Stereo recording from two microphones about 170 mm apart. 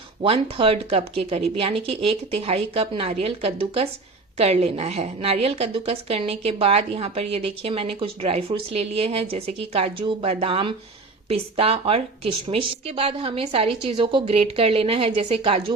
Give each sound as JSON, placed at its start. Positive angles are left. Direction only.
{"t": 0.2, "sound": "a woman's voice", "side_deg": -30}